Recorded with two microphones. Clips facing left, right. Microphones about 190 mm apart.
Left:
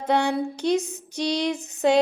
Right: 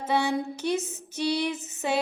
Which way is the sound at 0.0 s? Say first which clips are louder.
Left 3 dB; 15° left (ahead or behind).